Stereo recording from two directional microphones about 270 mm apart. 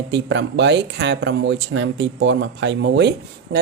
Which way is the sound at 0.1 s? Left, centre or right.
Right.